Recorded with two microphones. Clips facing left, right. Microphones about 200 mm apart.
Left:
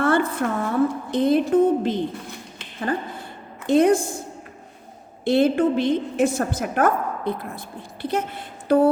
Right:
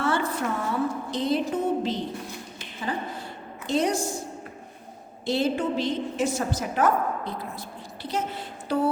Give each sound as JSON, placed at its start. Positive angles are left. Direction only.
{"t": 0.0, "sound": "a sound", "side_deg": 55}
{"t": 1.1, "sound": "a woman's voice", "side_deg": 55}
{"t": 5.2, "sound": "a woman's voice", "side_deg": 55}